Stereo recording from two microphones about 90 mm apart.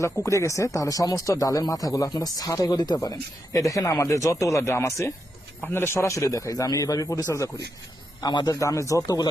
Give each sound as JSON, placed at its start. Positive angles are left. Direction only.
{"t": 0.0, "sound": "speech", "side_deg": 35}
{"t": 8.2, "sound": "a man's voice", "side_deg": 50}
{"t": 8.5, "sound": "speech", "side_deg": 35}